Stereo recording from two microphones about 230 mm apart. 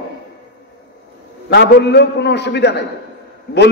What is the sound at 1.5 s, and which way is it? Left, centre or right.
A man's voice, left.